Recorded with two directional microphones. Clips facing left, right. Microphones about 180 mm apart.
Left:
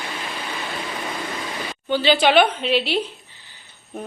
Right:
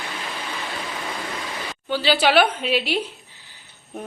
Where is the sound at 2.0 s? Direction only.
5° right (ahead or behind).